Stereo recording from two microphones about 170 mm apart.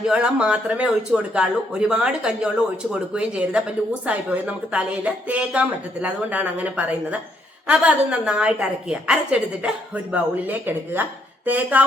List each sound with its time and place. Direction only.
0.1 s a woman's voice: 5° right (ahead or behind)